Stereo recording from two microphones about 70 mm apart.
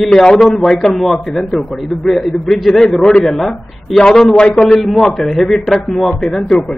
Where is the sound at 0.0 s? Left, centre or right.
Centre.